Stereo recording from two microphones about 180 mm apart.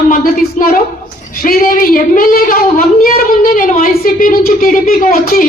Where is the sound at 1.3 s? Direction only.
50° left (ahead or behind).